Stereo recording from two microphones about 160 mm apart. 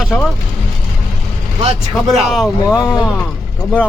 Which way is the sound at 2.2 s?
Centre (ahead or behind).